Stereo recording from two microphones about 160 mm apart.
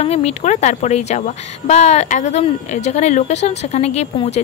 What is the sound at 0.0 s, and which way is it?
Speech, 40° left (ahead or behind).